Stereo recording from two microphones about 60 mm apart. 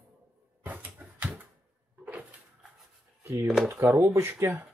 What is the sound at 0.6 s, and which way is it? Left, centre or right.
Dog, right.